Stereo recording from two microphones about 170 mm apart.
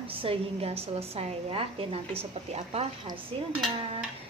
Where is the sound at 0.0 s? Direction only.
35° right (ahead or behind).